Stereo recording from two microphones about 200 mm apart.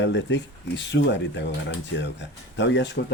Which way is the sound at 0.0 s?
60° left (ahead or behind).